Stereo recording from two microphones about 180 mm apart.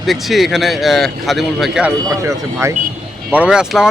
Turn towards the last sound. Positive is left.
turn(degrees=0)  # may be behind; listen again after turning